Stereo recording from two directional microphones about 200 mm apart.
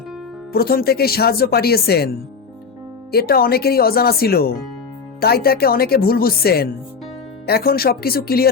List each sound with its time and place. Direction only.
0.5 s speech: 50° left (ahead or behind)
3.1 s speech: 50° left (ahead or behind)